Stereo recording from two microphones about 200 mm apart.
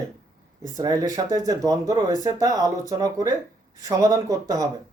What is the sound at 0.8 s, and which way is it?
Speech, 15° right (ahead or behind).